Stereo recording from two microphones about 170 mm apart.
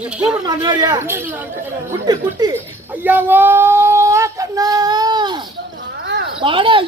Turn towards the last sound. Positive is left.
turn(degrees=-30)  # may be behind; listen again after turning